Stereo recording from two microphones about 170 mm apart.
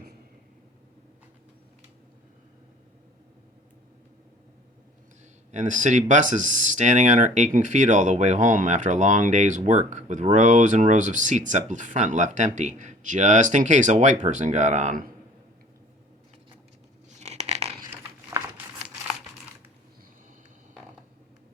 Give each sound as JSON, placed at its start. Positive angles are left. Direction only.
{"t": 5.5, "sound": "speech", "side_deg": -45}
{"t": 17.1, "sound": "a sound", "side_deg": -40}
{"t": 18.3, "sound": "crumpling", "side_deg": -15}